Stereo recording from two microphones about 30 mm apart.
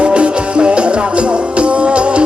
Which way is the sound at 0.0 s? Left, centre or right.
Right.